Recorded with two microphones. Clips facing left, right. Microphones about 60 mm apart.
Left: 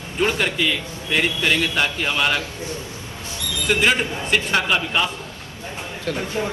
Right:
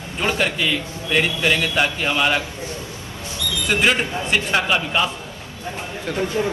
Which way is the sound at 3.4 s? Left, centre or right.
Left.